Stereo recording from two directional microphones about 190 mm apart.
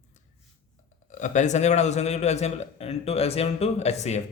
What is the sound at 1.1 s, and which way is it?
A man's voice, 40° left (ahead or behind).